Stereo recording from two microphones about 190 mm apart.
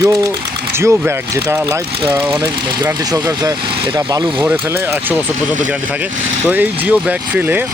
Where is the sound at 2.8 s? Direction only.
15° right (ahead or behind).